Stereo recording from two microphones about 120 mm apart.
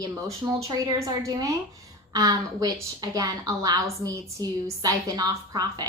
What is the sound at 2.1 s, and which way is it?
A woman's voice, 30° right (ahead or behind).